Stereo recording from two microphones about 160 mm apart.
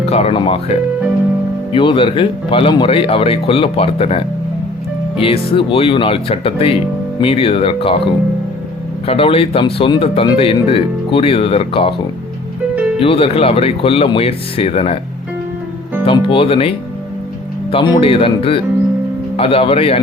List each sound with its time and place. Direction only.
0.0 s speech: 40° left (ahead or behind)
13.0 s speech: 35° left (ahead or behind)
16.0 s speech: 35° left (ahead or behind)